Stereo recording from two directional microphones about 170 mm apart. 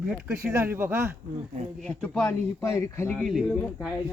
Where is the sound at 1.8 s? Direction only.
5° left (ahead or behind).